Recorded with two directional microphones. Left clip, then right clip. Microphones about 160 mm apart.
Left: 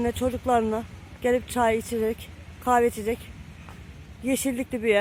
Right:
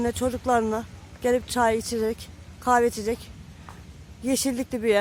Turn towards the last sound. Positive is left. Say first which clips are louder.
# even
turn(degrees=-10)  # may be behind; listen again after turning